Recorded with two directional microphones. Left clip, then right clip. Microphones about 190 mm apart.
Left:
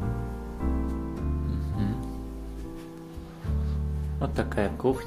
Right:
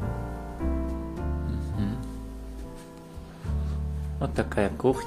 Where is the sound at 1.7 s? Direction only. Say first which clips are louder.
Left 1 dB; centre (ahead or behind).